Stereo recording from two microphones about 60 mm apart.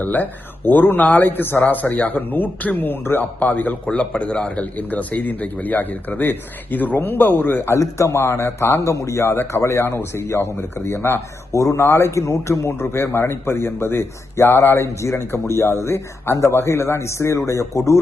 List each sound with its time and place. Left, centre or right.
0.0 s a man's voice: left
7.7 s speech: left
8.8 s speech: left
11.5 s speech: left
11.8 s speech: left